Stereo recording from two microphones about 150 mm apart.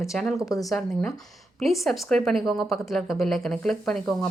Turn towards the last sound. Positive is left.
turn(degrees=0)  # may be behind; listen again after turning